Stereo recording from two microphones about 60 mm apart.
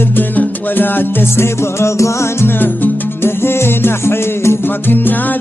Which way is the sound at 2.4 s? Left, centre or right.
Left.